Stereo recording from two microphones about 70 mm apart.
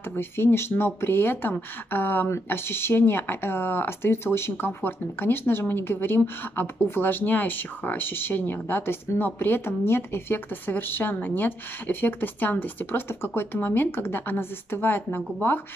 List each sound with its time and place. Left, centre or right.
0.1 s speech: left